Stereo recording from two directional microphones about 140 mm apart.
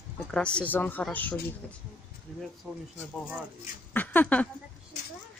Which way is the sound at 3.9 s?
15° left (ahead or behind).